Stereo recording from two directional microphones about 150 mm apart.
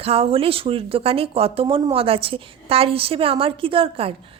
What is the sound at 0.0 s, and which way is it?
A woman's voice, 40° right (ahead or behind).